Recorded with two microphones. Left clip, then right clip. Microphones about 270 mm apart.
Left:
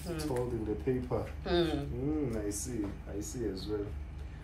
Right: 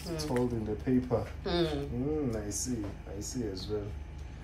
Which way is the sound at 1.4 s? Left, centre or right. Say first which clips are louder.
Left 4 dB; centre.